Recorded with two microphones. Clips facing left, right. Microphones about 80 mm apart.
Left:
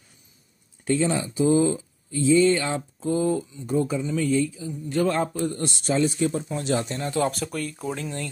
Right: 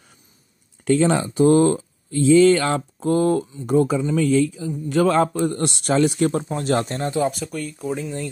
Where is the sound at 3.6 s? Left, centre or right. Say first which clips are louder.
Right 6 dB; right.